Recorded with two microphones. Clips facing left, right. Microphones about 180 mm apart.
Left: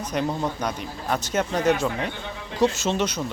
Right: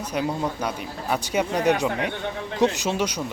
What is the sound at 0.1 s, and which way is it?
Speech, 5° right (ahead or behind).